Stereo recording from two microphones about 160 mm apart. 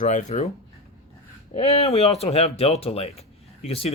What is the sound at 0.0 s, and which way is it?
Speech, 50° left (ahead or behind).